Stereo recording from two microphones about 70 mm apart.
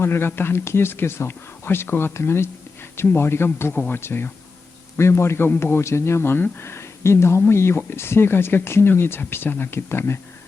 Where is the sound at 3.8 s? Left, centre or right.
Left.